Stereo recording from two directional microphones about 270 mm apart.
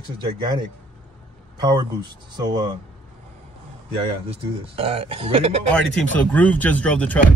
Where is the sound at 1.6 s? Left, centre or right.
Centre.